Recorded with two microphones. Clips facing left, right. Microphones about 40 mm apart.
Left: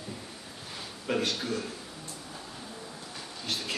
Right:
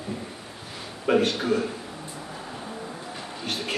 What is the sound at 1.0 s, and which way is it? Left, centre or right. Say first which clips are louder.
Speech: right 8 dB; right.